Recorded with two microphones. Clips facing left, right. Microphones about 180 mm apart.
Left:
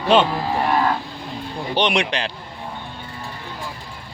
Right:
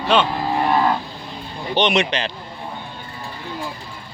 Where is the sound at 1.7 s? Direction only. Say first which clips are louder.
Right 2 dB; 10° left (ahead or behind).